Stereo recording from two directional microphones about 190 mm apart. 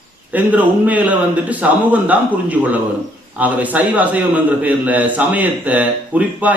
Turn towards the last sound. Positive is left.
turn(degrees=-10)  # may be behind; listen again after turning